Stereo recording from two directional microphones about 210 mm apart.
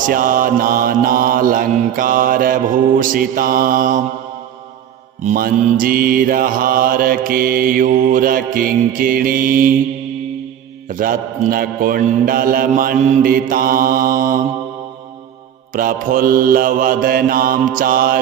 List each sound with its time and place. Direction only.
0.0 s mantra: 40° right (ahead or behind)
5.2 s mantra: 40° right (ahead or behind)
10.8 s mantra: 40° right (ahead or behind)
15.7 s mantra: 40° right (ahead or behind)